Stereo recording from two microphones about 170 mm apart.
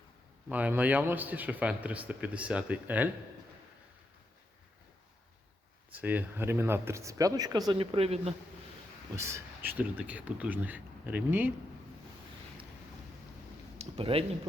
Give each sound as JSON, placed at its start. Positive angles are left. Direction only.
{"t": 0.4, "sound": "a man's voice", "side_deg": -10}
{"t": 5.9, "sound": "speech", "side_deg": -10}
{"t": 9.1, "sound": "a man's voice", "side_deg": -15}
{"t": 13.7, "sound": "speech", "side_deg": -35}